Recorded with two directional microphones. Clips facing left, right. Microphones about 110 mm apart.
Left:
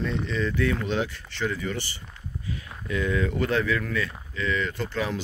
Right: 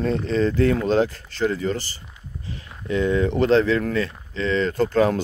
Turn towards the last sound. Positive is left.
turn(degrees=-45)  # may be behind; listen again after turning